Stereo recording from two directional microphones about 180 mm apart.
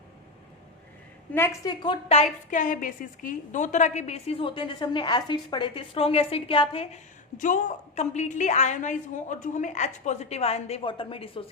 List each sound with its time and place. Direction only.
1.3 s a woman's voice: 10° left (ahead or behind)
1.7 s a woman's voice: 25° left (ahead or behind)
7.3 s a woman's voice: 45° left (ahead or behind)